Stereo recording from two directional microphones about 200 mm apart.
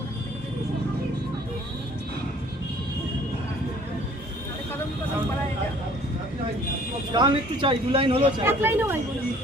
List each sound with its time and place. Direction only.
7.1 s speech: 25° right (ahead or behind)
8.4 s speech: 10° right (ahead or behind)